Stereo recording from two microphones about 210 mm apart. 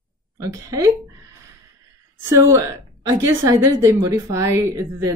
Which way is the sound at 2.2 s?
15° right (ahead or behind).